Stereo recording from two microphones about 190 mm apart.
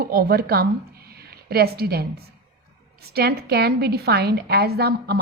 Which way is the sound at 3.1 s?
55° right (ahead or behind).